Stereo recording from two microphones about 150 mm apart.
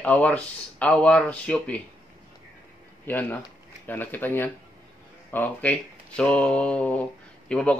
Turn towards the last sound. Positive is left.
turn(degrees=5)  # may be behind; listen again after turning